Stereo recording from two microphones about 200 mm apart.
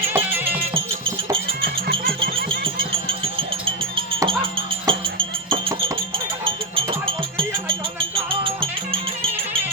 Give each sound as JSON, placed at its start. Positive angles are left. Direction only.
{"t": 1.6, "sound": "music", "side_deg": -50}
{"t": 3.9, "sound": "music", "side_deg": -25}